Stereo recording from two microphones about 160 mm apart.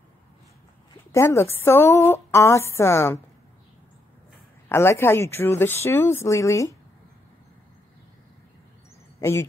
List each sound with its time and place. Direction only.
1.1 s speech: 15° left (ahead or behind)
4.6 s speech: 15° left (ahead or behind)
9.2 s speech: 15° left (ahead or behind)